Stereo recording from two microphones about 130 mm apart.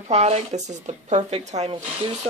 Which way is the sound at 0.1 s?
55° right (ahead or behind).